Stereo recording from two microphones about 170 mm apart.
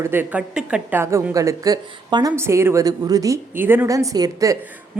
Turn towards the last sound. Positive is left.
turn(degrees=-20)  # may be behind; listen again after turning